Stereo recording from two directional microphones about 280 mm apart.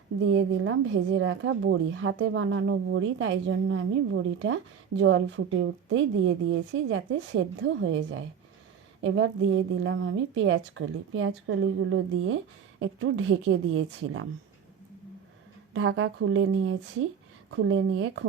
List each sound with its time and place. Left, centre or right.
0.3 s a woman's voice: right
15.7 s a woman's voice: right